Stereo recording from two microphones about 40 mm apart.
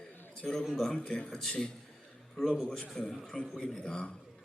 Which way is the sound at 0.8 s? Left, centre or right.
Centre.